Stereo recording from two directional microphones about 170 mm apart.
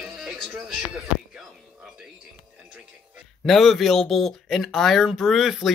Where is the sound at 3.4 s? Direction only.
Centre (ahead or behind).